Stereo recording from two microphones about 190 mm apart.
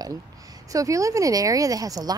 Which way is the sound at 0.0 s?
20° right (ahead or behind).